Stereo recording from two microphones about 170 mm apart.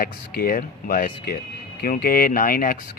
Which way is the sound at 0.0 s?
60° left (ahead or behind).